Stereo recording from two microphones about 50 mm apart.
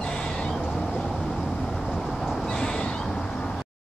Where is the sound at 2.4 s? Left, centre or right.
Centre.